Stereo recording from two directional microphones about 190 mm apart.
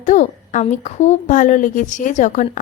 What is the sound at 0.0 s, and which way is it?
A woman's voice, 40° left (ahead or behind).